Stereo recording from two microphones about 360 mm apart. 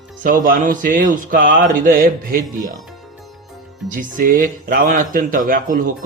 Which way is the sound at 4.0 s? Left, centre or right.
Right.